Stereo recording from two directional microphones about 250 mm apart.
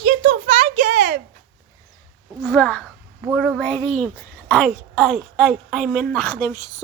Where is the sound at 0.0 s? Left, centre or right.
Right.